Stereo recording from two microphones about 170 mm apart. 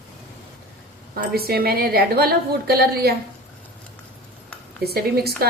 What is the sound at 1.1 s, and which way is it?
A woman's voice, 65° right (ahead or behind).